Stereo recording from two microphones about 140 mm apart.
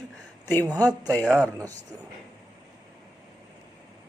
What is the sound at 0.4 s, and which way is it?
Speech, 15° left (ahead or behind).